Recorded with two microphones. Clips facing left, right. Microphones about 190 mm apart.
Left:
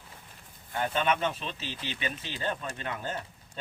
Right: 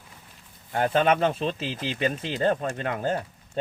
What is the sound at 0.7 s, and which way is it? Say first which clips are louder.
Speech: right 7 dB; 50° right (ahead or behind).